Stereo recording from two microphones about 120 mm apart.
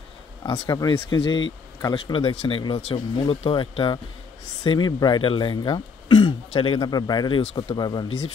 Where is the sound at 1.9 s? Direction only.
45° left (ahead or behind).